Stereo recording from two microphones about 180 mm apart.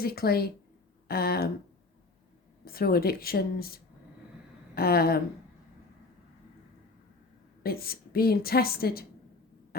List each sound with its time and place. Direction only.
0.0 s a woman's voice: 60° left (ahead or behind)
2.6 s a woman's voice: 55° left (ahead or behind)
7.6 s a woman's voice: 55° left (ahead or behind)